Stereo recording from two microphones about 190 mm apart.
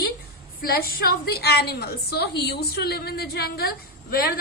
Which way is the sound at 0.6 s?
50° left (ahead or behind).